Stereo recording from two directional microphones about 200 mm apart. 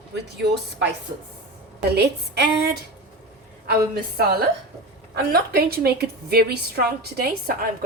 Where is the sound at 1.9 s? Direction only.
55° right (ahead or behind).